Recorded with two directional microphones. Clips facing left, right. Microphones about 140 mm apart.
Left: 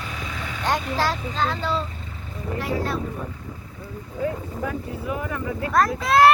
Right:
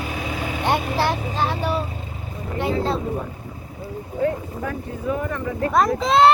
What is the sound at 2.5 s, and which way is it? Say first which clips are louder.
Speech: right 4 dB; 25° right (ahead or behind).